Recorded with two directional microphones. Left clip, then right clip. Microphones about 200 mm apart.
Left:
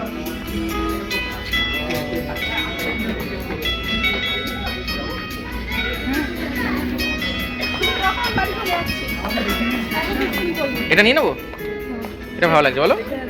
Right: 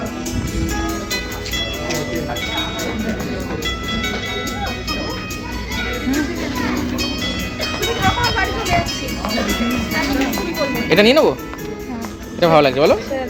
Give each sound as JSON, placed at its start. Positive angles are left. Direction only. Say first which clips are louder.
{"t": 5.7, "sound": "music", "louder": "right 1 dB", "side_deg": -30}
{"t": 10.6, "sound": "music", "louder": "right 2 dB", "side_deg": -35}
{"t": 12.4, "sound": "speech", "louder": "right 3 dB", "side_deg": -30}